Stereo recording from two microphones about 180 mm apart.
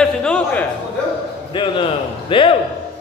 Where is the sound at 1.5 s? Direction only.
25° left (ahead or behind).